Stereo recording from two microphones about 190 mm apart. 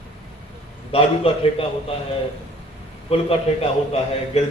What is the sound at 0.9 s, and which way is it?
Speech, 30° left (ahead or behind).